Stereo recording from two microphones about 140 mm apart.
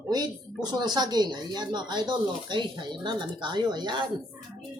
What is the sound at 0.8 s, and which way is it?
Speech, 30° right (ahead or behind).